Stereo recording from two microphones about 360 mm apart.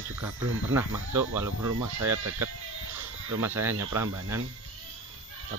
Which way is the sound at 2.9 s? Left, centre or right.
Centre.